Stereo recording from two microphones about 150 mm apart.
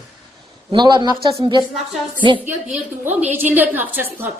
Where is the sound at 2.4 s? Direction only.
15° right (ahead or behind).